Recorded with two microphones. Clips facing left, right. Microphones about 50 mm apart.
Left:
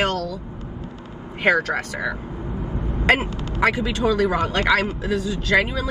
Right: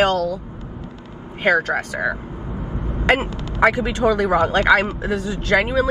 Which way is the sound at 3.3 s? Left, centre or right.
Left.